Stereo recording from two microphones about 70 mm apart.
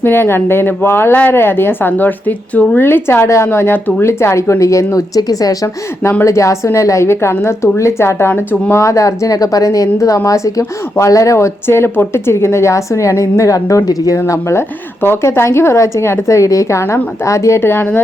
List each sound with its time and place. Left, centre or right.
0.0 s speech: left
6.2 s a woman's voice: left
14.3 s speech: left
17.6 s speech: left